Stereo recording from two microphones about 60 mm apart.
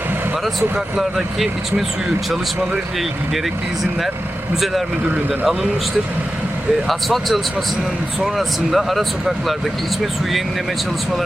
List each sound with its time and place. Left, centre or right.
0.9 s speech: centre
6.8 s speech: centre